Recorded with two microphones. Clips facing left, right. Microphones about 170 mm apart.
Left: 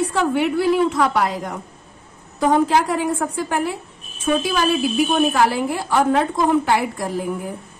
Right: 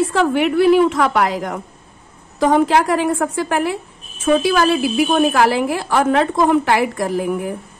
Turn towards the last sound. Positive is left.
turn(degrees=-80)